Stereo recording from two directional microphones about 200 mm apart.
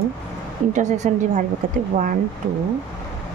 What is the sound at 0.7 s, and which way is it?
Speech, 35° right (ahead or behind).